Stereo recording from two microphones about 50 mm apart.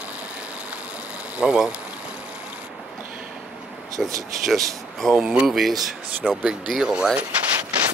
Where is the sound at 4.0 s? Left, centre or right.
Centre.